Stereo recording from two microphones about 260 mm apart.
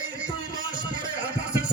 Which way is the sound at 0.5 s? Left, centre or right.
Centre.